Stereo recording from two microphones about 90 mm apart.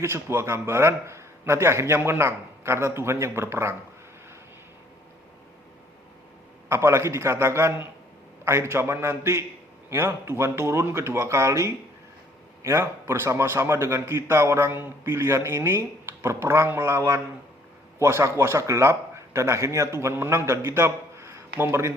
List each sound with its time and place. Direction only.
0.0 s a man's voice: 30° right (ahead or behind)
6.7 s a man's voice: 30° right (ahead or behind)